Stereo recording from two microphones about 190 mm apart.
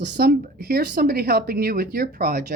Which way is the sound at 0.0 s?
55° right (ahead or behind).